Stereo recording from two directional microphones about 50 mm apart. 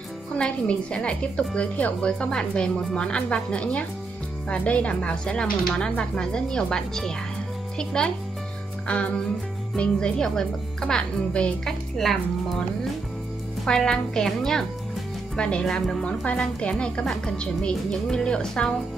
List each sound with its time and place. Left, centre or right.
0.4 s a woman's voice: centre
8.8 s music: left
9.8 s speech: centre
11.6 s speech: centre
13.7 s speech: centre
16.3 s a woman's voice: left